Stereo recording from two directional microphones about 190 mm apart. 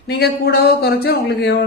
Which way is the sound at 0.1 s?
60° left (ahead or behind).